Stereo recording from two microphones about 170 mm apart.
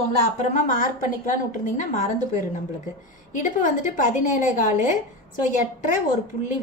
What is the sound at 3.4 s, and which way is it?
A woman's voice, 50° left (ahead or behind).